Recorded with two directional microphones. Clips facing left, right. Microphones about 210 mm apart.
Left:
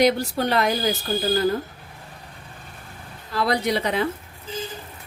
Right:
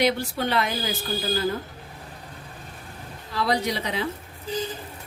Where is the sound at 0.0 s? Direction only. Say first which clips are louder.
Left 4 dB; 40° left (ahead or behind).